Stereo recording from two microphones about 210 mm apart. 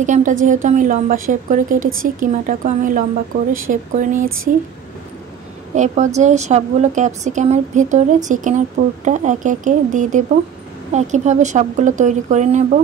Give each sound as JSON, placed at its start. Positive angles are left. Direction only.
{"t": 0.0, "sound": "a woman's voice", "side_deg": -35}
{"t": 5.8, "sound": "a woman's voice", "side_deg": -35}